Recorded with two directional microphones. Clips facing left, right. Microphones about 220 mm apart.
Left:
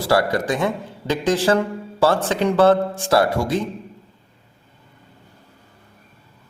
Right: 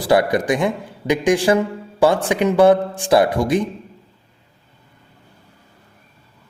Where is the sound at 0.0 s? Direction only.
15° right (ahead or behind).